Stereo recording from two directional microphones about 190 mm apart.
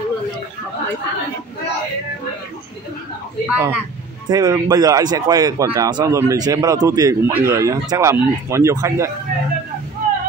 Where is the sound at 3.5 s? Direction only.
10° right (ahead or behind).